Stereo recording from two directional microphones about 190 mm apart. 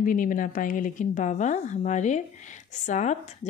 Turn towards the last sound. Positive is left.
turn(degrees=40)  # may be behind; listen again after turning